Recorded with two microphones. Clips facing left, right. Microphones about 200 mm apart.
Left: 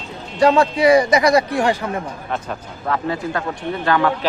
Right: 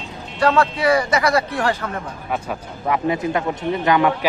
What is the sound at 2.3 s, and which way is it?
Speech, 5° right (ahead or behind).